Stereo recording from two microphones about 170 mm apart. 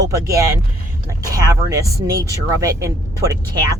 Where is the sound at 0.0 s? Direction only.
20° right (ahead or behind).